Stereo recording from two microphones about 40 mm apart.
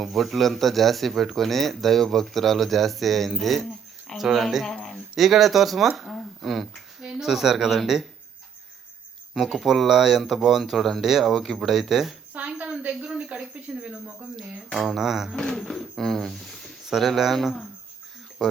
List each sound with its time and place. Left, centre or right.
0.0 s speech: centre
4.7 s a sound: centre
5.1 s speech: centre
6.1 s a sound: centre
7.1 s speech: centre
9.6 s speech: centre
12.3 s a sound: right
13.1 s a sound: right
13.5 s speech: right
14.8 s speech: centre
15.4 s speech: centre
15.8 s speech: centre